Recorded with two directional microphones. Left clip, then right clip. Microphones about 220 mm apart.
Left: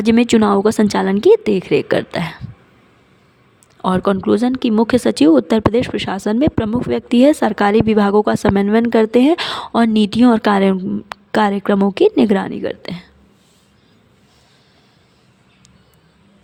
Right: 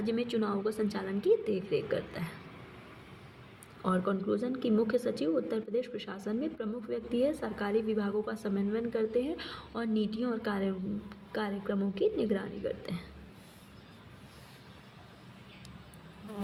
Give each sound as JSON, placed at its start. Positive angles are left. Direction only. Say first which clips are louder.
{"t": 0.0, "sound": "a woman's voice", "louder": "left 19 dB", "side_deg": 55}
{"t": 3.8, "sound": "speech", "louder": "left 16 dB", "side_deg": 50}